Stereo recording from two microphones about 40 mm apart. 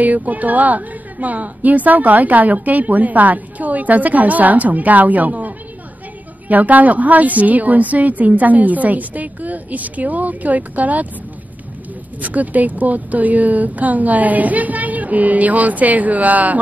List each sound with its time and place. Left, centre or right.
0.0 s a woman's voice: right
6.5 s a woman's voice: right
12.2 s a woman's voice: right